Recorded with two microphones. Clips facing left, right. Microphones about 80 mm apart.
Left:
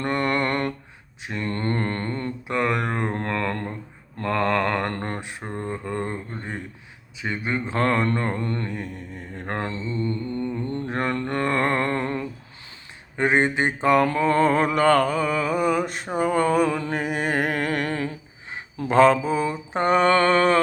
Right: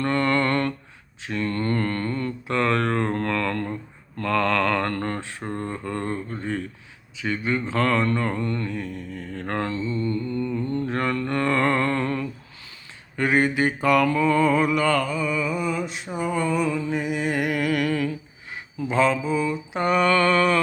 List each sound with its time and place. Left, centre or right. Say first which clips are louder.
0.0 s a sound: right 2 dB; left
1.2 s mantra: right 2 dB; left
2.5 s mantra: right 2 dB; centre; by 10.8 s left
10.8 s mantra: right 1 dB; left
13.1 s a sound: even; left
14.1 s mantra: even; left
18.8 s mantra: left 5 dB; left